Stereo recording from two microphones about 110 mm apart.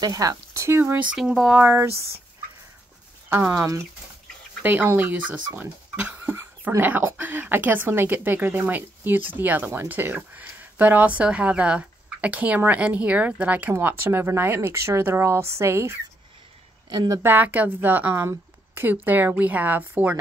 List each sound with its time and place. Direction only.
0.0 s speech: 35° right (ahead or behind)
1.0 s speech: 5° right (ahead or behind)
1.6 s speech: 20° right (ahead or behind)
3.3 s speech: 20° right (ahead or behind)
16.9 s a woman's voice: 40° right (ahead or behind)
17.2 s speech: 15° right (ahead or behind)